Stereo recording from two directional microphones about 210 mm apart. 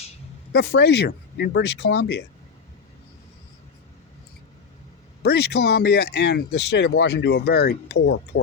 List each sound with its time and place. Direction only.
0.5 s speech: 55° left (ahead or behind)
5.2 s speech: 50° left (ahead or behind)